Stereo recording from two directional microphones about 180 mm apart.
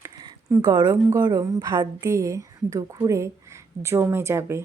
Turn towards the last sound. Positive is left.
turn(degrees=-15)  # may be behind; listen again after turning